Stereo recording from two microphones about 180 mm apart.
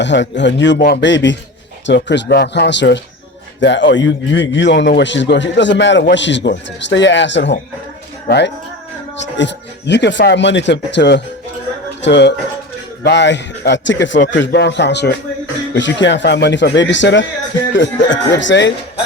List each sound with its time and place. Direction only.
0.0 s a man's voice: 80° left
0.8 s speech: 55° left (ahead or behind)
1.0 s a man's voice: 85° left
3.6 s a man's voice: 90° left
8.3 s a man's voice: 70° left (ahead or behind)
15.7 s a man's voice: 85° left